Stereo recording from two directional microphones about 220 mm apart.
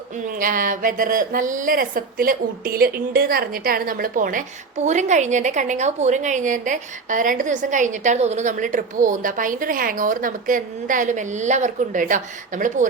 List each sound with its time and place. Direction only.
0.2 s a woman's voice: 40° right (ahead or behind)